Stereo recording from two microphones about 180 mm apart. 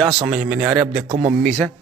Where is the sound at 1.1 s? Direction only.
30° right (ahead or behind).